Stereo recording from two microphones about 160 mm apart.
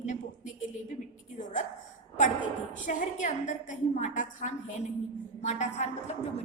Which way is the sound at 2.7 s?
50° left (ahead or behind).